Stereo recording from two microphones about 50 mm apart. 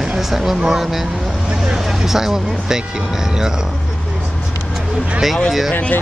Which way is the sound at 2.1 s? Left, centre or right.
Centre.